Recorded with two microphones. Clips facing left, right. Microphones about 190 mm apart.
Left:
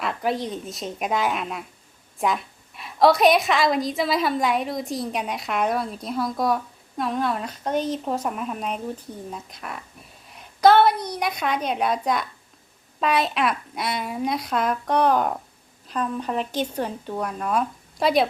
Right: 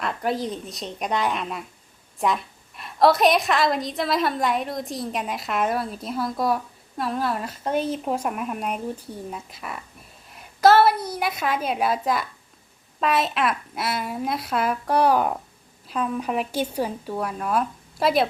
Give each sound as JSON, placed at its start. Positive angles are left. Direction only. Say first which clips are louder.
{"t": 0.0, "sound": "a woman's voice", "louder": "even", "side_deg": 0}